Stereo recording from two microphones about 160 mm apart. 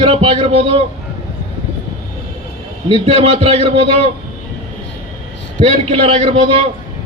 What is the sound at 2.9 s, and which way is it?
Speech, 40° right (ahead or behind).